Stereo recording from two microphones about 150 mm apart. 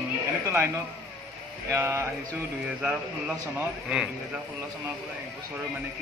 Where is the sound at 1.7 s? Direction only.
20° right (ahead or behind).